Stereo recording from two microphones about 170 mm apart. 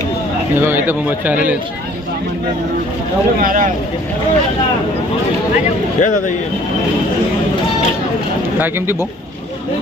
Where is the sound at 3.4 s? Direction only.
50° right (ahead or behind).